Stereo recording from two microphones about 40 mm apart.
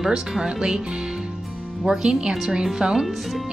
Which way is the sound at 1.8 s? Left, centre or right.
Centre.